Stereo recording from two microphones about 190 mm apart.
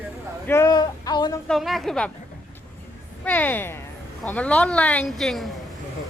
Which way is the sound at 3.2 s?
10° left (ahead or behind).